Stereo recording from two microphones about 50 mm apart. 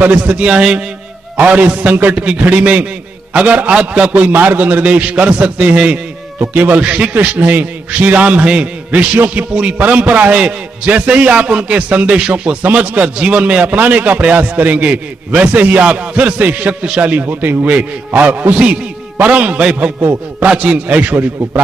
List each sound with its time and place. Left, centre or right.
0.0 s a man's voice: right
6.8 s a man's voice: right
18.5 s a man's voice: right